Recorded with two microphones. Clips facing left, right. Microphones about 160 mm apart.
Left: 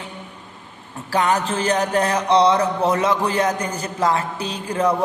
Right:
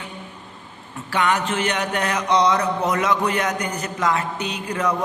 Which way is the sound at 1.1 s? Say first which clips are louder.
Left 2 dB; 35° left (ahead or behind).